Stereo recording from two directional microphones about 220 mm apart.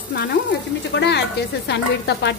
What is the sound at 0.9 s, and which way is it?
A woman's voice, 50° left (ahead or behind).